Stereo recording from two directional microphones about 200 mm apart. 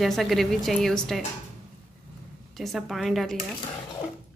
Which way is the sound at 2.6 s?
Centre (ahead or behind).